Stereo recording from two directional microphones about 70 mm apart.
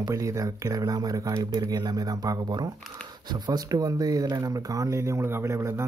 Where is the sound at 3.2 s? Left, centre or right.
Right.